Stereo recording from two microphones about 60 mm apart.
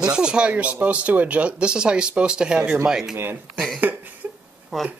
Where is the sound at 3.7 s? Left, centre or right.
Right.